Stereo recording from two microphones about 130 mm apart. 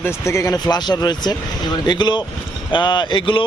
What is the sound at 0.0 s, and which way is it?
Speech, 20° left (ahead or behind).